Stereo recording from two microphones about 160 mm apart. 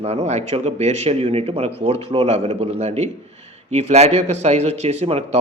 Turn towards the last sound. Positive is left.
turn(degrees=-40)  # may be behind; listen again after turning